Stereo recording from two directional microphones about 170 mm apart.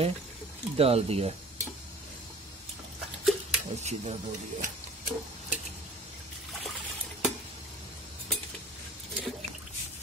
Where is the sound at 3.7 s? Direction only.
40° right (ahead or behind).